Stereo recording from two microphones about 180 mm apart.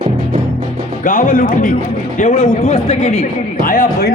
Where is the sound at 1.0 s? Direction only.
45° left (ahead or behind).